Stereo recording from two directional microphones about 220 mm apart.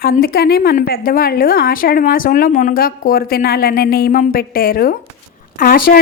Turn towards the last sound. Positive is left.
turn(degrees=40)  # may be behind; listen again after turning